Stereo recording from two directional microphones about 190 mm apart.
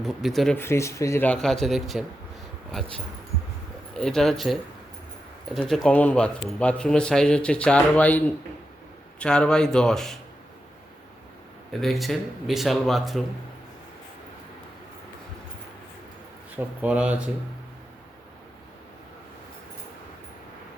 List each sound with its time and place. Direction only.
0.0 s a man's voice: centre (ahead or behind)
3.9 s a man's voice: 5° left (ahead or behind)
5.5 s a man's voice: centre (ahead or behind)
11.7 s a man's voice: centre (ahead or behind)
16.6 s speech: 5° right (ahead or behind)